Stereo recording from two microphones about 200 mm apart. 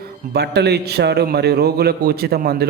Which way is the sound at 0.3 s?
55° right (ahead or behind).